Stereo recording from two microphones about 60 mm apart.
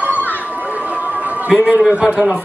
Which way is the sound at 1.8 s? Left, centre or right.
Centre.